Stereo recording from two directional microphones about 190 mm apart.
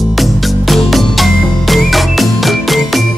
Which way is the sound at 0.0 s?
Centre (ahead or behind).